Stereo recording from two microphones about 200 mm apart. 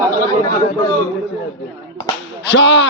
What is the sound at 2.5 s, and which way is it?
Speech, 60° left (ahead or behind).